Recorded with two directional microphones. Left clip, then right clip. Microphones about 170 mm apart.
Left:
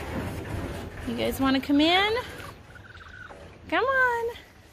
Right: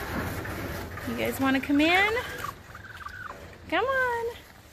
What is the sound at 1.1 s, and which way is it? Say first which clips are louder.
Speech: left 1 dB; 30° left (ahead or behind).